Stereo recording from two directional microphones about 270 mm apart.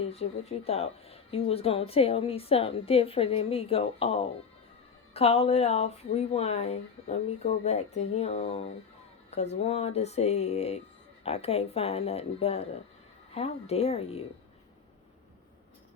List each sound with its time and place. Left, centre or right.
0.0 s a woman's voice: left